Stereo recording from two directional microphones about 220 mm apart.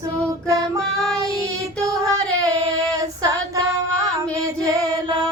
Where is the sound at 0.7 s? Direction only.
5° left (ahead or behind).